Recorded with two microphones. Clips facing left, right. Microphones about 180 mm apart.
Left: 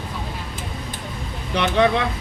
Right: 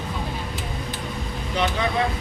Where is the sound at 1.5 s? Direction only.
70° left (ahead or behind).